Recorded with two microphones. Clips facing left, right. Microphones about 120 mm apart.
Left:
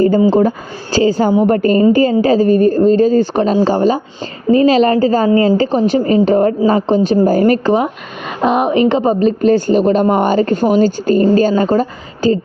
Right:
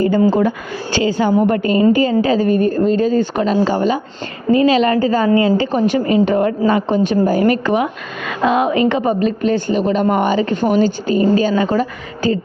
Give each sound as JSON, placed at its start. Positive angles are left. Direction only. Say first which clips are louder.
{"t": 0.3, "sound": "speech", "louder": "left 3 dB", "side_deg": 30}